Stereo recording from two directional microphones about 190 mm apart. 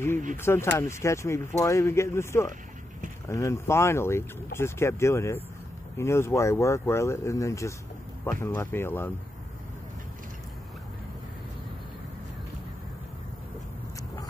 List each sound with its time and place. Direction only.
0.4 s speech: 15° left (ahead or behind)